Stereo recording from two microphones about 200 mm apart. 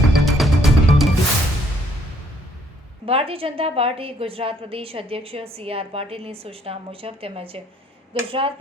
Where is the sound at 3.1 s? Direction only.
30° right (ahead or behind).